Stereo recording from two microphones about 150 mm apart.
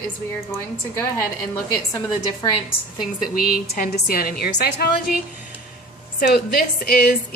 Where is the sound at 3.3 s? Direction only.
70° left (ahead or behind); by 4.9 s 90° left.